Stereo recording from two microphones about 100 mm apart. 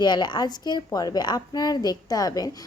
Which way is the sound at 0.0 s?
45° left (ahead or behind).